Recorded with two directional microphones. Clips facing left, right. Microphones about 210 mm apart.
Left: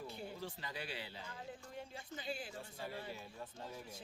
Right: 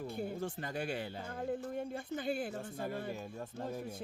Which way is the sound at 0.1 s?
50° right (ahead or behind).